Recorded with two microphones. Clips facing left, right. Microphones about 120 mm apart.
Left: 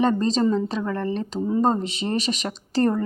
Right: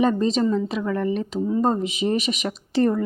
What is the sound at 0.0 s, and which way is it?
Speech, 5° right (ahead or behind).